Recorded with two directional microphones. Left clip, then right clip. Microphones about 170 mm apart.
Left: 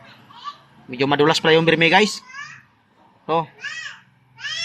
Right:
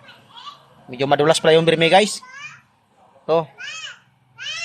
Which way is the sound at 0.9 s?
30° right (ahead or behind).